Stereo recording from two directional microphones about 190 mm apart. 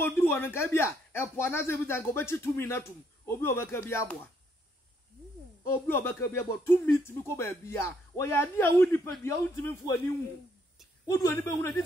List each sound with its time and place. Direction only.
0.0 s speech: 10° left (ahead or behind)
5.6 s speech: 10° left (ahead or behind)
11.3 s speech: 15° left (ahead or behind)